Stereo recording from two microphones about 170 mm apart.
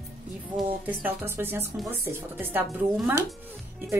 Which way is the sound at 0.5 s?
10° right (ahead or behind).